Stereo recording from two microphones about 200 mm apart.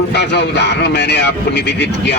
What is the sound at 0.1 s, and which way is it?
A man's voice, 60° left (ahead or behind).